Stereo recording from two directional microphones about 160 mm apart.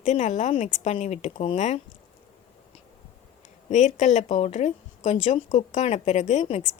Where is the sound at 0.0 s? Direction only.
45° left (ahead or behind).